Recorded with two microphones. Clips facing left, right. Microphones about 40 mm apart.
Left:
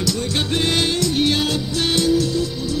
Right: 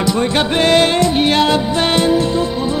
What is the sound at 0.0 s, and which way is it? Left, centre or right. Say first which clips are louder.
Music: right 7 dB; right.